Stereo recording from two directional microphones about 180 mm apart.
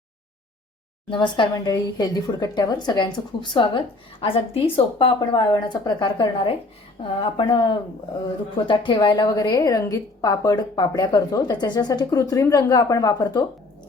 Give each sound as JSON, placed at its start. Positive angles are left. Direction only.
{"t": 1.1, "sound": "speech", "side_deg": 25}